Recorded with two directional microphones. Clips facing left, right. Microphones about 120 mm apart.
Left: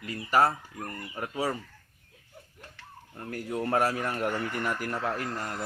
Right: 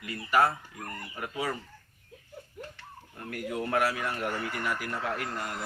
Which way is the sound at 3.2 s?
30° left (ahead or behind).